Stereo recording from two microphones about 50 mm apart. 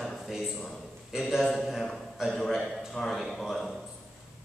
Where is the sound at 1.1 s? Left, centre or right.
Centre.